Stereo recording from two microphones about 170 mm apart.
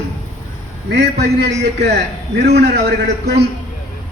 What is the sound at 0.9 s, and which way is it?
A man's voice, 80° right.